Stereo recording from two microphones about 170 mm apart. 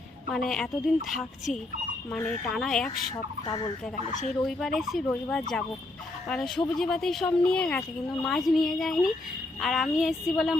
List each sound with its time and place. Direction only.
0.3 s a woman's voice: centre (ahead or behind)
3.4 s speech: 25° left (ahead or behind)
4.1 s speech: 45° left (ahead or behind)
4.4 s a woman's voice: centre (ahead or behind)